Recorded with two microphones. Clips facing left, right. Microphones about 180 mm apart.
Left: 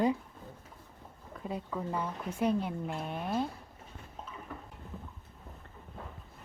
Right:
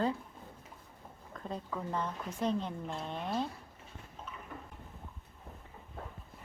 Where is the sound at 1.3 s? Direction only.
10° left (ahead or behind).